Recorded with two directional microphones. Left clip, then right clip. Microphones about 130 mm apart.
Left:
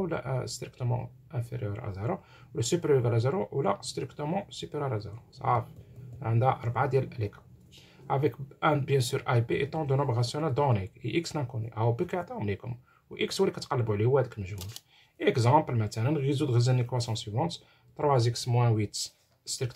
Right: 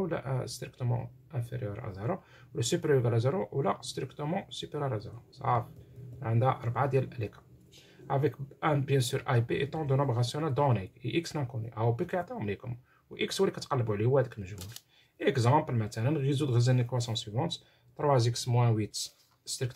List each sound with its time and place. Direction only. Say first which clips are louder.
0.0 s speech: left 2 dB; 10° left (ahead or behind)
18.2 s speech: left 2 dB; 5° left (ahead or behind)